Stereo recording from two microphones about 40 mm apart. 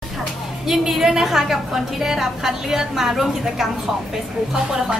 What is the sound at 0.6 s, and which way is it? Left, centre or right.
A woman's voice, centre.